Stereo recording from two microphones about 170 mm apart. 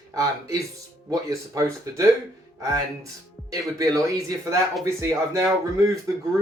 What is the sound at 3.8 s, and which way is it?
Speech, 20° right (ahead or behind).